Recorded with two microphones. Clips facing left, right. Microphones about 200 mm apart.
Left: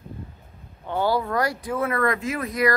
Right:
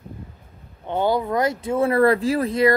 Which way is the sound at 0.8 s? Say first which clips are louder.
Right 2 dB; 20° right (ahead or behind).